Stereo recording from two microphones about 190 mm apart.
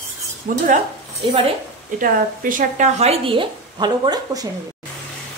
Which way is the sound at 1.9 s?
45° right (ahead or behind).